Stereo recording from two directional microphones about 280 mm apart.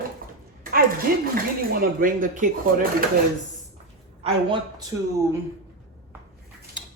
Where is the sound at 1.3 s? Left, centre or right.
Right.